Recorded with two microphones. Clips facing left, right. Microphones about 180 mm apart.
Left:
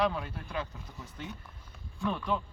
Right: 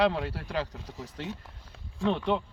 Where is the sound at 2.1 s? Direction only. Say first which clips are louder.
Right 5 dB; 25° right (ahead or behind).